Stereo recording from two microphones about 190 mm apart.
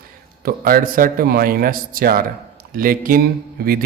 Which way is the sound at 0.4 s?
50° right (ahead or behind).